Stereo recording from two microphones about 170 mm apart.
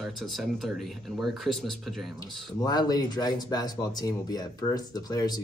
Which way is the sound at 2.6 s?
25° left (ahead or behind).